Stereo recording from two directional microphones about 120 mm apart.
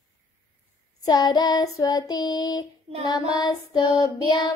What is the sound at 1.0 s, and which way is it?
Child singing, 35° left (ahead or behind).